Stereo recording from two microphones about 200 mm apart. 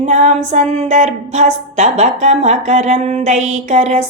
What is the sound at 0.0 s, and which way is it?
Female singing, 35° right (ahead or behind).